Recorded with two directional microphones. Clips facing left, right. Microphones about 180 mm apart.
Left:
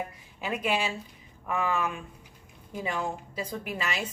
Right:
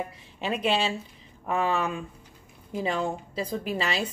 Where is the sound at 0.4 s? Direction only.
30° right (ahead or behind).